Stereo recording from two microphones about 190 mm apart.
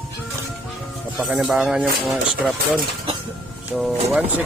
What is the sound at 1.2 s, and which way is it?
Speech, 5° right (ahead or behind).